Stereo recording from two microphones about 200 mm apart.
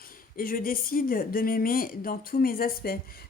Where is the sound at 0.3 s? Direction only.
45° left (ahead or behind).